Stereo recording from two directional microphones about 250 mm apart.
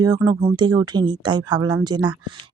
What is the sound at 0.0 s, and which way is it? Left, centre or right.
Speech, centre.